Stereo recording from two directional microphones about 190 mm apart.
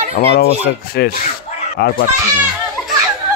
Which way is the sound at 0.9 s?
55° left (ahead or behind).